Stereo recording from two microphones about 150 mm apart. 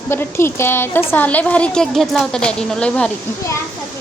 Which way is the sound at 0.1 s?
15° left (ahead or behind).